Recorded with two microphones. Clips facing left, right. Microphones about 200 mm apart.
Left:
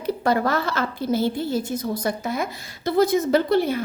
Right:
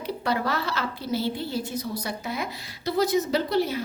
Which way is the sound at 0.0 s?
45° left (ahead or behind).